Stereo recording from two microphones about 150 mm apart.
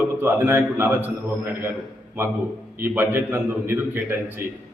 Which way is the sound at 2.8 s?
15° right (ahead or behind).